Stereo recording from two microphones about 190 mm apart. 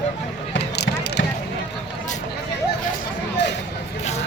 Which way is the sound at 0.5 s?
75° left (ahead or behind).